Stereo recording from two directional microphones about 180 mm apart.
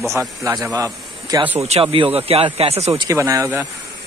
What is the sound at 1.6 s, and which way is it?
Speech, 35° right (ahead or behind).